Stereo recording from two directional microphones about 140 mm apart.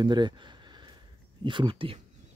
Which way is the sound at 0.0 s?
30° right (ahead or behind).